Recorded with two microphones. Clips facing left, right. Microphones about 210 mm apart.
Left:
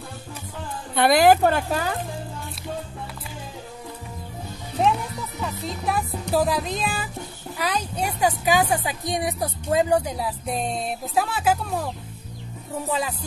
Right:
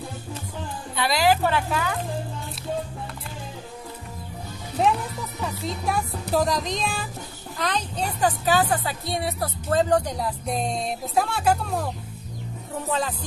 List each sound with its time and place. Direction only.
0.9 s a woman's voice: 50° left (ahead or behind)
4.8 s music: centre (ahead or behind)
5.4 s speech: centre (ahead or behind)